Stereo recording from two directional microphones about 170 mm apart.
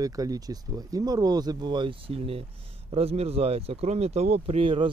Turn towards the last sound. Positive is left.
turn(degrees=-30)  # may be behind; listen again after turning